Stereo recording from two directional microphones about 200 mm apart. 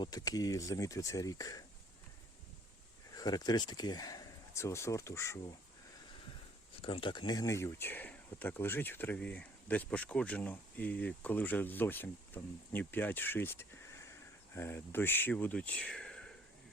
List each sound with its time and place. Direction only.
0.0 s speech: 20° left (ahead or behind)
3.2 s speech: 20° left (ahead or behind)
6.8 s speech: 25° left (ahead or behind); by 16.3 s 5° left (ahead or behind)